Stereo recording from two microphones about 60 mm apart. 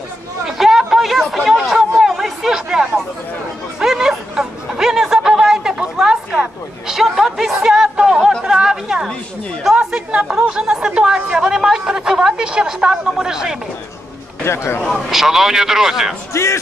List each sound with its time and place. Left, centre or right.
0.5 s chatter: centre
8.5 s a sound: centre
9.8 s chatter: centre
10.5 s speech: centre
11.3 s a sound: centre
14.4 s a man's voice: left
14.8 s speech: centre
15.0 s speech: centre